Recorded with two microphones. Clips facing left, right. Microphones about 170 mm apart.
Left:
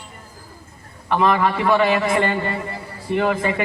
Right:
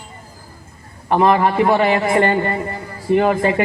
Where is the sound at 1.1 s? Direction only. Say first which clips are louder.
Right 4 dB; 45° right (ahead or behind).